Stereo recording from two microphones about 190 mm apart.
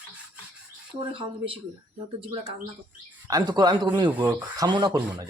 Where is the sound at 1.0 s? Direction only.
30° right (ahead or behind).